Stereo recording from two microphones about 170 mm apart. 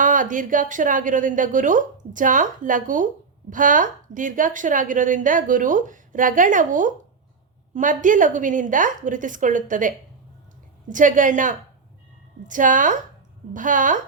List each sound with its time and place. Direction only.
0.0 s a woman's voice: 50° right (ahead or behind)